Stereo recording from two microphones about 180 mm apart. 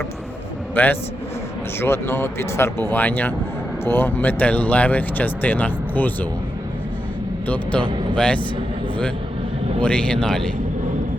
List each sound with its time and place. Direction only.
0.8 s speech: 10° left (ahead or behind)
7.4 s speech: 5° left (ahead or behind)
9.8 s a man's voice: 5° left (ahead or behind)